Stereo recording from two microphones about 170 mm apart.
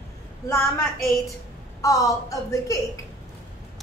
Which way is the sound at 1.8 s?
20° left (ahead or behind).